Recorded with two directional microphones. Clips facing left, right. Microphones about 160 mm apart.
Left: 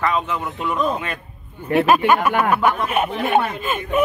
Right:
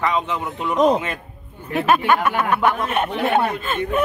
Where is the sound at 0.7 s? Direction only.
90° right.